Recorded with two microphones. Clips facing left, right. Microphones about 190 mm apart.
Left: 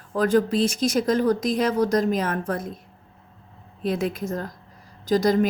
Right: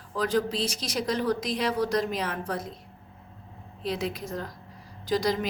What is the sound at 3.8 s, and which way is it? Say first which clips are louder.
A woman's voice: left 6 dB; 50° left (ahead or behind).